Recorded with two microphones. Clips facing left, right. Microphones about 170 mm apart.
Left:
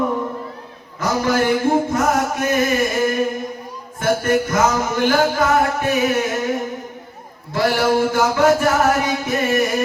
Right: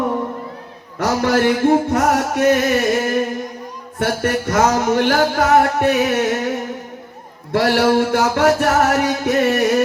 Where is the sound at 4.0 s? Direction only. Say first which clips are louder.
Left 2 dB; 70° right (ahead or behind).